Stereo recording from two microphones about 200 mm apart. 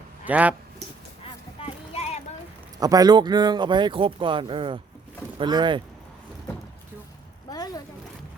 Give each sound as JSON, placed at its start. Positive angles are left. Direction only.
{"t": 0.3, "sound": "speech", "side_deg": -5}
{"t": 1.2, "sound": "music", "side_deg": 30}
{"t": 2.7, "sound": "speech", "side_deg": -20}
{"t": 7.5, "sound": "a sound", "side_deg": 20}